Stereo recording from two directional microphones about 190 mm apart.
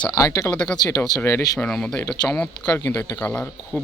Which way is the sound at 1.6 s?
5° left (ahead or behind).